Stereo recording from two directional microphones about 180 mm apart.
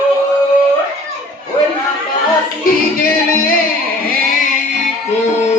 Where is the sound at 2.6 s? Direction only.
55° left (ahead or behind).